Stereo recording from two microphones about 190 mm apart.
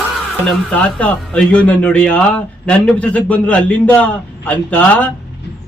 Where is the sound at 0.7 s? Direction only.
5° left (ahead or behind).